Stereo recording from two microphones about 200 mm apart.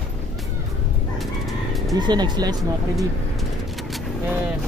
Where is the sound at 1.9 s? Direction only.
20° right (ahead or behind).